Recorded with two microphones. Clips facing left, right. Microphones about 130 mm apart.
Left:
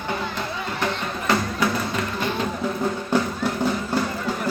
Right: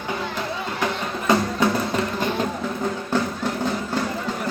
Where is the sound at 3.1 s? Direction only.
15° left (ahead or behind).